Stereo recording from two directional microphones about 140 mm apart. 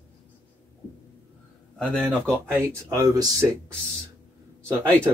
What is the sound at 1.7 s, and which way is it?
Speech, 5° left (ahead or behind).